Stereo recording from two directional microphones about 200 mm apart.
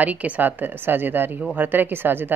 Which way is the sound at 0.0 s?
5° right (ahead or behind).